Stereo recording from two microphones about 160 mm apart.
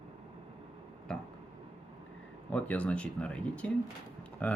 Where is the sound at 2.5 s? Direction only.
10° left (ahead or behind).